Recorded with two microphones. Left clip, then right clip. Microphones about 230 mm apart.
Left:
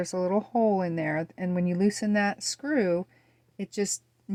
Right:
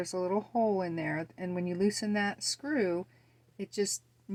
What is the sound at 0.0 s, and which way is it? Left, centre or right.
Speech, left.